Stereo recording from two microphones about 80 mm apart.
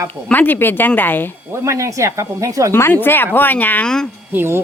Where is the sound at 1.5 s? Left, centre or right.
Right.